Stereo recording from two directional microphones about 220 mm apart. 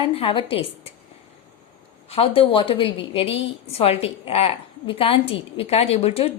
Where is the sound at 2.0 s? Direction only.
25° left (ahead or behind).